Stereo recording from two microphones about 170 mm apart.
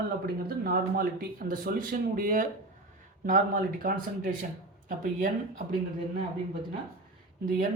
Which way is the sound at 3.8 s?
55° right (ahead or behind).